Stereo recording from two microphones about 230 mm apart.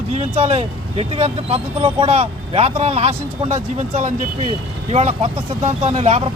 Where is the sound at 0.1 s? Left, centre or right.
Right.